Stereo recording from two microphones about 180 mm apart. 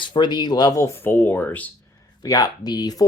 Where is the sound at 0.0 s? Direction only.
25° left (ahead or behind).